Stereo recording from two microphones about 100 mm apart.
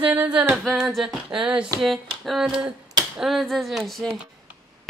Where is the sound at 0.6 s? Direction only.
Centre (ahead or behind).